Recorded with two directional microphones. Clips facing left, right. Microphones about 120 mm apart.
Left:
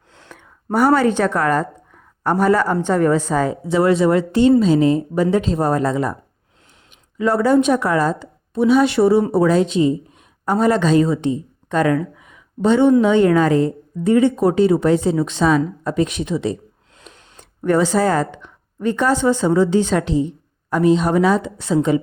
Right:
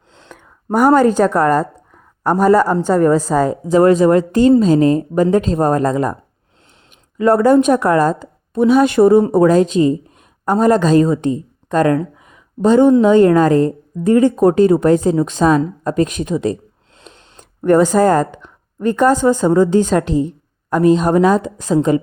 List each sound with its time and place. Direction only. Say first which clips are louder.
0.7 s a woman's voice: right 4 dB; 45° right (ahead or behind)
7.2 s a woman's voice: right 4 dB; 50° right (ahead or behind)